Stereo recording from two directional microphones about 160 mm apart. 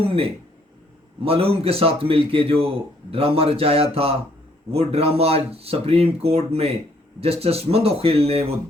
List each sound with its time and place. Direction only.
1.2 s a man's voice: 35° right (ahead or behind)